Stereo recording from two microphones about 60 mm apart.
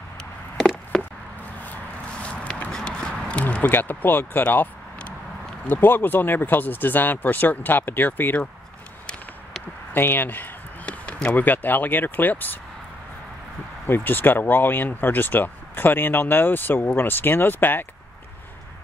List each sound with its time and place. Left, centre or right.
0.6 s a sound: centre
2.2 s a sound: centre
3.7 s speech: left
9.9 s speech: left
10.9 s speech: centre
13.8 s speech: left